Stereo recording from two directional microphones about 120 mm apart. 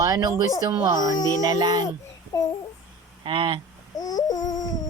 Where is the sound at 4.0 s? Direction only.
30° left (ahead or behind).